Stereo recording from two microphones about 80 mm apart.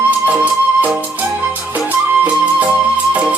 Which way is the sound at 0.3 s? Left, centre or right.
Centre.